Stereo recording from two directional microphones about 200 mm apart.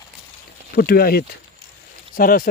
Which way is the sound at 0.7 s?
50° left (ahead or behind).